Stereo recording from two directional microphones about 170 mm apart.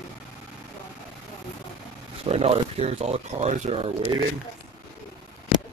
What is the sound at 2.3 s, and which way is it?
Speech, 35° right (ahead or behind).